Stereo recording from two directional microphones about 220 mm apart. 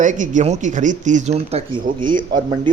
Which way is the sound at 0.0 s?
35° right (ahead or behind).